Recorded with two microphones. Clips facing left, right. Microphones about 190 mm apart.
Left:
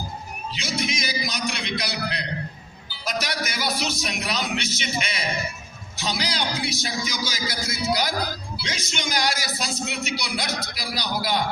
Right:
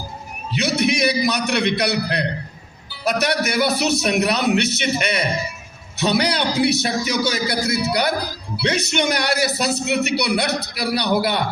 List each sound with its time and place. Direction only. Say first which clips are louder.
0.5 s a man's voice: right 10 dB; 65° right (ahead or behind)